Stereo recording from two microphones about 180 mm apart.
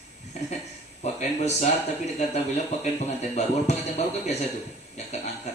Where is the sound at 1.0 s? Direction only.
40° left (ahead or behind).